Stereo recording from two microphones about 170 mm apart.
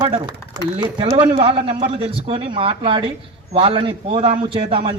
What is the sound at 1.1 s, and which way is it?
A man's voice, 35° right (ahead or behind).